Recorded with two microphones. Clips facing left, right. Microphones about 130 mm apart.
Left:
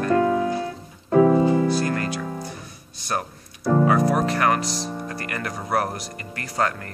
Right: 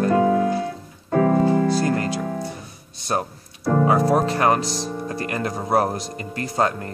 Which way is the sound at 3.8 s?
25° right (ahead or behind).